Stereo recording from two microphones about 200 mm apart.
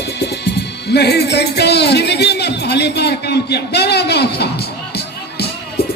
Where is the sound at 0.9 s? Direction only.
55° left (ahead or behind).